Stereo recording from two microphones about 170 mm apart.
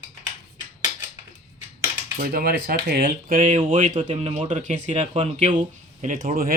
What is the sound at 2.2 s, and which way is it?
Speech, 65° right (ahead or behind).